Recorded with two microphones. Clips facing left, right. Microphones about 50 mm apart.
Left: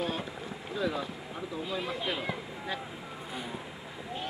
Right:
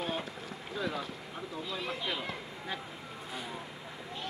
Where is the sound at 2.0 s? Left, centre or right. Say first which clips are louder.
Left 3 dB; centre.